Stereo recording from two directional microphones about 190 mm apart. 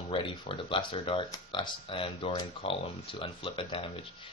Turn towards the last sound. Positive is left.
turn(degrees=25)  # may be behind; listen again after turning